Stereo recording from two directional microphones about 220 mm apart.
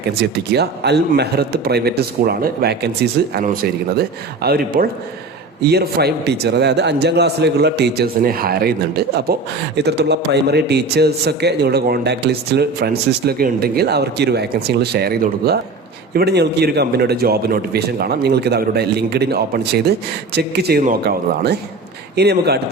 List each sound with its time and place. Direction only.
0.2 s a man's voice: 50° right (ahead or behind)
22.1 s a man's voice: 45° right (ahead or behind)